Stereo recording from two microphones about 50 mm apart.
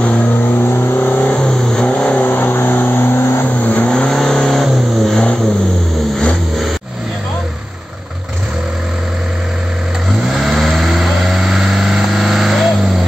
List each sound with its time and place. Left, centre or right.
0.0 s vehicle: left
1.3 s vehicle: centre
2.2 s vehicle: left
3.4 s vehicle: left
3.9 s vehicle: centre
10.4 s vehicle: centre